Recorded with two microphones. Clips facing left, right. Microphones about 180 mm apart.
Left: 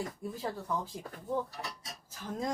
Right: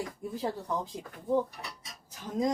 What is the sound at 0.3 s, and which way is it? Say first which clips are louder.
Speech: right 4 dB; 20° right (ahead or behind).